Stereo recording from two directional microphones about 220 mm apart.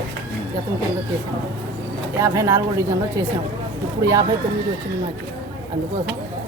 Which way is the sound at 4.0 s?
15° right (ahead or behind).